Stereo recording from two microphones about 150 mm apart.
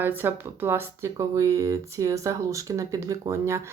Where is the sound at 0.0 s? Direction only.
15° right (ahead or behind).